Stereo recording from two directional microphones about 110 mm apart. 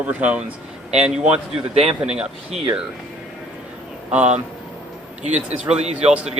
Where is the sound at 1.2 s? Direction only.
75° right (ahead or behind).